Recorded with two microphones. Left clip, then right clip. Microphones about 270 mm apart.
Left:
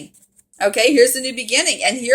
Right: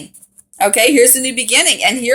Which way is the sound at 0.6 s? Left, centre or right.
Centre.